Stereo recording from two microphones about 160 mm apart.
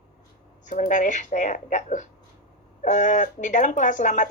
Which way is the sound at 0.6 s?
55° left (ahead or behind).